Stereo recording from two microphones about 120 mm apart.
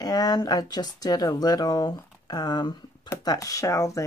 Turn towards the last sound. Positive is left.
turn(degrees=25)  # may be behind; listen again after turning